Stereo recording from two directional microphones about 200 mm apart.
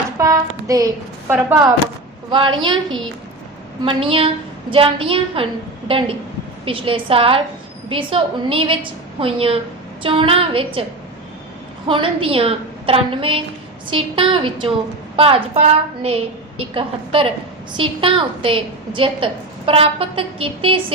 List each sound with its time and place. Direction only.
0.2 s a woman's voice: 15° right (ahead or behind)
2.3 s a woman's voice: 25° right (ahead or behind)
6.7 s a woman's voice: 25° right (ahead or behind)
11.9 s a woman's voice: 25° right (ahead or behind)